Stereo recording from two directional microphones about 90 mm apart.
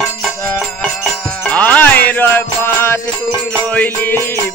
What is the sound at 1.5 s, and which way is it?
Music, 20° left (ahead or behind).